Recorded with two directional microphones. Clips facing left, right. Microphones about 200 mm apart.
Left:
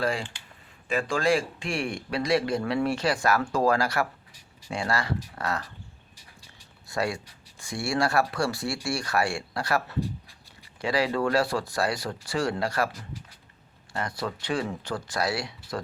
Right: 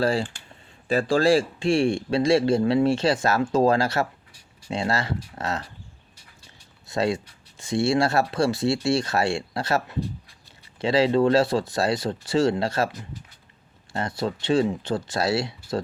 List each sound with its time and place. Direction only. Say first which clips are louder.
0.0 s speech: right 5 dB; 30° right (ahead or behind)
6.8 s speech: right 5 dB; 20° right (ahead or behind)
13.9 s speech: right 4 dB; 25° right (ahead or behind)